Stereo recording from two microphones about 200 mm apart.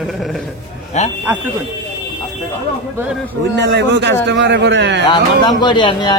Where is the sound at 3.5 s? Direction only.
60° right (ahead or behind).